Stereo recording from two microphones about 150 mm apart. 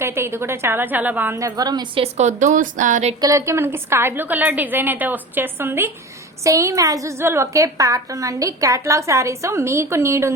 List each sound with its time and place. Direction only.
0.0 s a woman's voice: 15° right (ahead or behind)
2.1 s speech: 50° right (ahead or behind)
3.2 s a woman's voice: 20° right (ahead or behind)